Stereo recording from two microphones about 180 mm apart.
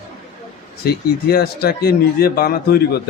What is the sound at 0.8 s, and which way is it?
Speech, 60° left (ahead or behind).